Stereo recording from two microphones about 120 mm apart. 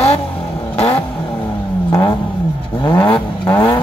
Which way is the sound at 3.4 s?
15° left (ahead or behind).